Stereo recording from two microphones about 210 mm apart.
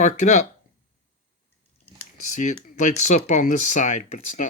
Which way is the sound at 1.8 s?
35° left (ahead or behind).